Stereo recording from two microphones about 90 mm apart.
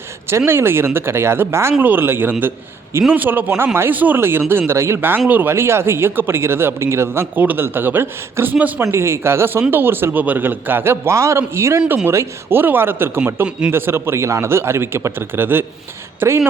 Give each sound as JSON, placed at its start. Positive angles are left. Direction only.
{"t": 0.3, "sound": "speech", "side_deg": -25}